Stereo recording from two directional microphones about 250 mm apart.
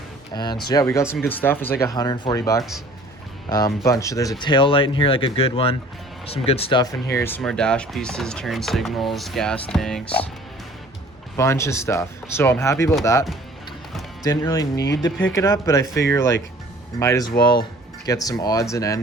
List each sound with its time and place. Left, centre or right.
0.3 s speech: centre
3.8 s speech: centre
11.3 s speech: centre
14.3 s speech: centre